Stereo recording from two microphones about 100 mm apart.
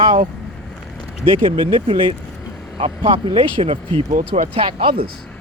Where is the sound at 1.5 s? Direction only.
55° right (ahead or behind).